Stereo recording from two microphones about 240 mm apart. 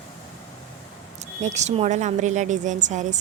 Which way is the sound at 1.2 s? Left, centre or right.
Right.